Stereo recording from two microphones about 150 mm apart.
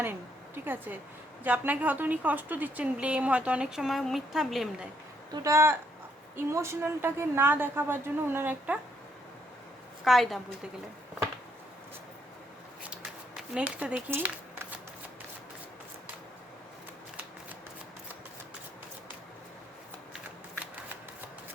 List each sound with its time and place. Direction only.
0.0 s a woman's voice: 15° right (ahead or behind)
5.3 s a woman's voice: 20° right (ahead or behind)
10.0 s a woman's voice: centre (ahead or behind)
12.8 s a sound: 5° right (ahead or behind)